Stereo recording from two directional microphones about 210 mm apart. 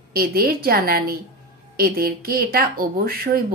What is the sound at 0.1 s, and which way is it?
A woman's voice, 45° right (ahead or behind).